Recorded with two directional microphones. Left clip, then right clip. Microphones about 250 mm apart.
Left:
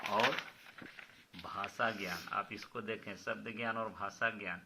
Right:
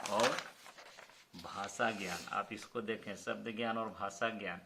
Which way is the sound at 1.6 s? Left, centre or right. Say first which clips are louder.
Even; left.